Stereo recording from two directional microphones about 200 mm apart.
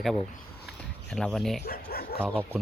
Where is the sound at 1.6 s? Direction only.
50° left (ahead or behind).